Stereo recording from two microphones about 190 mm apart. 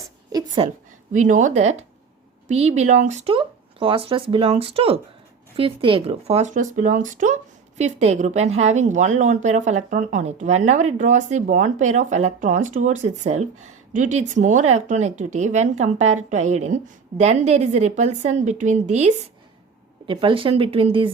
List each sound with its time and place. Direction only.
0.3 s a sound: 20° right (ahead or behind)
1.1 s a woman's voice: 40° right (ahead or behind)
20.1 s speech: 25° right (ahead or behind)